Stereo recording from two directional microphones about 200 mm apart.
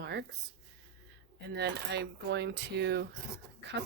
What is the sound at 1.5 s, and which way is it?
Speech, 55° right (ahead or behind).